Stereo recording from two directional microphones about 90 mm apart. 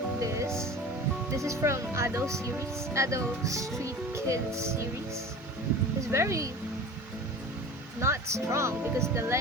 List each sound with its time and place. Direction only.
0.2 s music: 35° right (ahead or behind)
1.4 s speech: 35° right (ahead or behind)
6.1 s speech: 30° right (ahead or behind)
8.0 s speech: 30° right (ahead or behind)